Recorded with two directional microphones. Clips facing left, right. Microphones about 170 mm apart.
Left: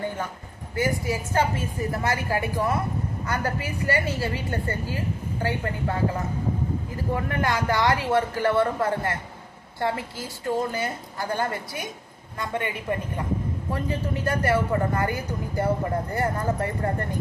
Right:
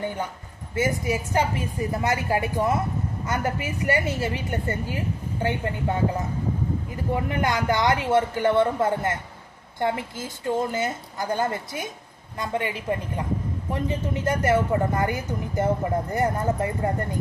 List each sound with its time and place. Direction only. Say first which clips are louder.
0.8 s speech: right 1 dB; 20° right (ahead or behind)